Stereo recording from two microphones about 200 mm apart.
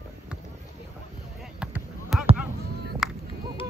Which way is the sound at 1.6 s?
5° right (ahead or behind).